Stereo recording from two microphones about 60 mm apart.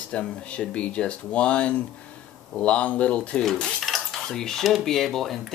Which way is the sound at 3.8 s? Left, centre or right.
Centre.